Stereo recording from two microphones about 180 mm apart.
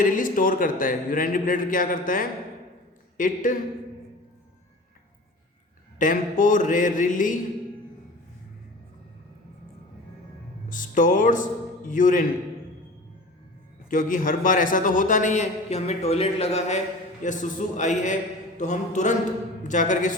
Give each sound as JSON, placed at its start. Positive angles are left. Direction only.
{"t": 0.0, "sound": "a man's voice", "side_deg": 50}
{"t": 6.0, "sound": "a man's voice", "side_deg": 45}
{"t": 10.7, "sound": "a man's voice", "side_deg": 45}
{"t": 13.9, "sound": "a man's voice", "side_deg": 45}
{"t": 18.5, "sound": "mantra", "side_deg": 40}
{"t": 19.6, "sound": "a man's voice", "side_deg": 45}